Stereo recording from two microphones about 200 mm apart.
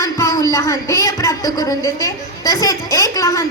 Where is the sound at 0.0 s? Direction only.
15° left (ahead or behind).